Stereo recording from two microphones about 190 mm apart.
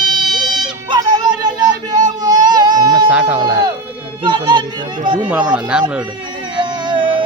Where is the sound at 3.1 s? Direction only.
10° right (ahead or behind).